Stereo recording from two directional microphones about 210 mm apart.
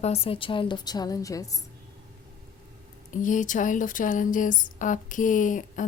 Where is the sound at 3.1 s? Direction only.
40° left (ahead or behind).